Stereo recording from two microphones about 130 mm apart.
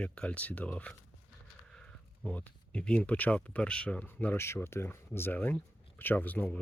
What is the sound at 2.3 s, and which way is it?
Speech, 10° left (ahead or behind).